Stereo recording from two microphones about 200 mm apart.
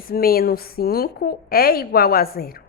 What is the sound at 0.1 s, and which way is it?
A woman's voice, 50° left (ahead or behind).